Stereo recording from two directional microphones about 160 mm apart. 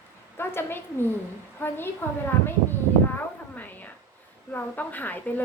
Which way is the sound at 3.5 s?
10° left (ahead or behind).